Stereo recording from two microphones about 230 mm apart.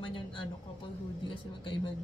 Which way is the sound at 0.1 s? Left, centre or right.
Left.